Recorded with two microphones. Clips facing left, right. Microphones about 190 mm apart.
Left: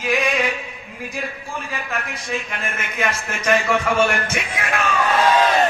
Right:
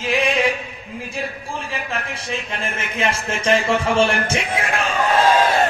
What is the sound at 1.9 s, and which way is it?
A man's voice, 30° right (ahead or behind).